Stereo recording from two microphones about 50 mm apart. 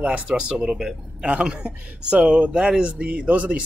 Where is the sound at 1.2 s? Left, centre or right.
Right.